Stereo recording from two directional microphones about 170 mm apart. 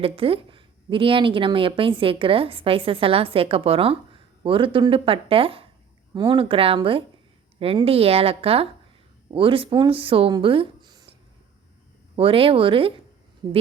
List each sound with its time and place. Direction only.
0.0 s a woman's voice: 35° right (ahead or behind)
12.1 s a woman's voice: 35° right (ahead or behind)